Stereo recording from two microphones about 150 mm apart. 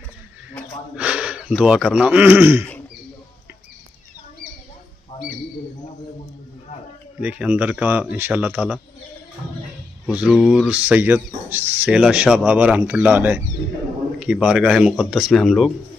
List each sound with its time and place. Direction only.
0.9 s speech: 5° right (ahead or behind)
5.1 s bird: 35° left (ahead or behind)
7.2 s speech: 10° right (ahead or behind)
10.0 s speech: 5° right (ahead or behind)